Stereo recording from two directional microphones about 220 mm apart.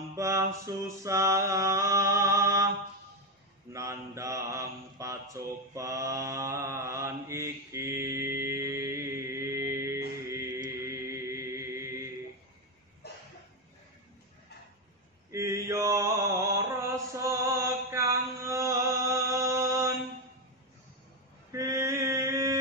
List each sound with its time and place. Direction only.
0.1 s mantra: 15° right (ahead or behind)
3.7 s mantra: 15° right (ahead or behind)
13.0 s a sound: 45° left (ahead or behind)
15.3 s mantra: 15° right (ahead or behind)
21.5 s mantra: 15° right (ahead or behind)